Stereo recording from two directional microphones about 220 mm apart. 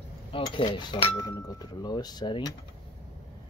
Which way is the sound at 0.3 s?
25° left (ahead or behind).